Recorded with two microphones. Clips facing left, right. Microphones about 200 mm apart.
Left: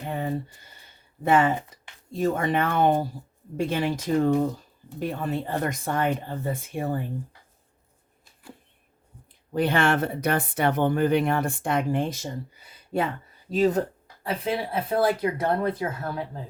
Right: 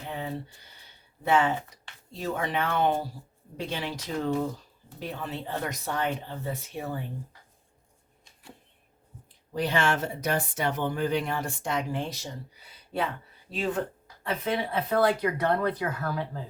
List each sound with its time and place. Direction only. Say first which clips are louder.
0.0 s a sound: left 5 dB; 50° left (ahead or behind)
1.2 s speech: left 3 dB; 50° left (ahead or behind)
9.5 s speech: left 4 dB; 55° left (ahead or behind); by 13.8 s 40° left (ahead or behind)
14.8 s speech: left 1 dB; 25° left (ahead or behind)